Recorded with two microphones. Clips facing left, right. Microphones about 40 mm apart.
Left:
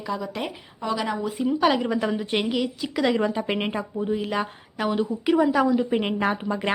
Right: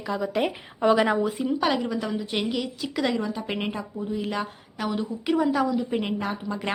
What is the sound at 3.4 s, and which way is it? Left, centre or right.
Speech, centre.